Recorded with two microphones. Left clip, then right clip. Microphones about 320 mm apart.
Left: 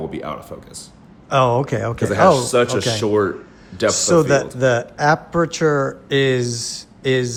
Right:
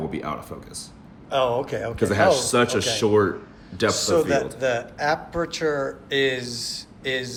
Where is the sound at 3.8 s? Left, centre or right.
Left.